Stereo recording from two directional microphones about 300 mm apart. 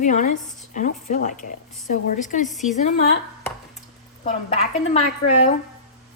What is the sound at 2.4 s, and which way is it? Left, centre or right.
Speech, centre.